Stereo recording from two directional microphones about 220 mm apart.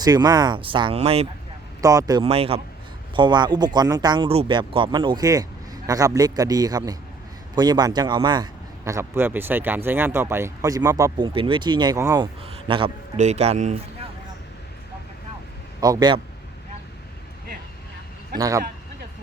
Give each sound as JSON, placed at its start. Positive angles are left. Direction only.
{"t": 0.0, "sound": "a man's voice", "side_deg": -20}
{"t": 1.8, "sound": "a man's voice", "side_deg": -15}
{"t": 15.8, "sound": "a man's voice", "side_deg": -20}
{"t": 18.3, "sound": "speech", "side_deg": -15}